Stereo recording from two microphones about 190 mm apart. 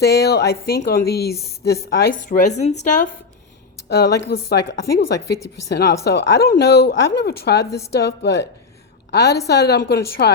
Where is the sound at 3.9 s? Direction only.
60° left (ahead or behind).